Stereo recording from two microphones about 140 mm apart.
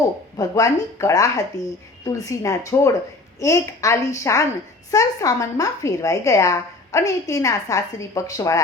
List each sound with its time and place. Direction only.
0.3 s a woman's voice: 25° left (ahead or behind)